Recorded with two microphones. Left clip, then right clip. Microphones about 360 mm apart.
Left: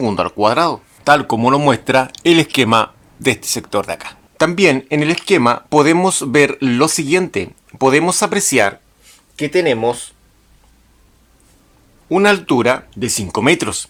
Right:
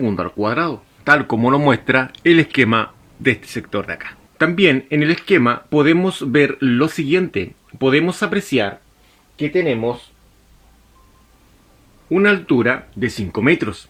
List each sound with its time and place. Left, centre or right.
0.0 s speech: centre
9.3 s speech: left
12.1 s speech: centre